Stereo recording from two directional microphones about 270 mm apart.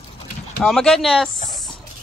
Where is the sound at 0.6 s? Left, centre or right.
Centre.